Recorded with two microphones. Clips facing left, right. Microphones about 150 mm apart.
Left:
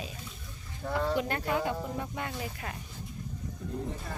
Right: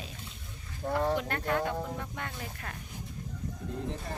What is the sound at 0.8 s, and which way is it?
Speech, 20° right (ahead or behind).